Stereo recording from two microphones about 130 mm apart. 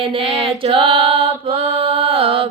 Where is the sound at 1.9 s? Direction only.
45° right (ahead or behind).